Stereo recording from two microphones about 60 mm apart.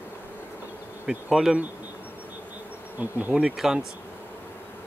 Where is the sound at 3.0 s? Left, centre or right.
Right.